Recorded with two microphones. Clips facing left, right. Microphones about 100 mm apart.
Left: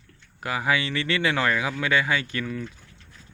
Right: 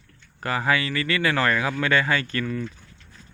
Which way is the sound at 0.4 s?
10° left (ahead or behind).